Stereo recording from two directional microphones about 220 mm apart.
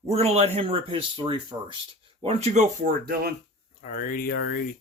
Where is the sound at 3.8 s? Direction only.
40° left (ahead or behind).